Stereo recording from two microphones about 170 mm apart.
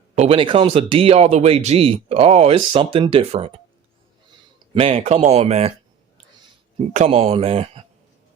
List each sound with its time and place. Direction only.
0.2 s speech: 30° right (ahead or behind)
4.7 s speech: 35° right (ahead or behind)
6.7 s speech: 40° right (ahead or behind)